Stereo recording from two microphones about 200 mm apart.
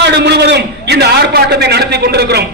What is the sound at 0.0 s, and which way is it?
A man's voice, 55° right (ahead or behind).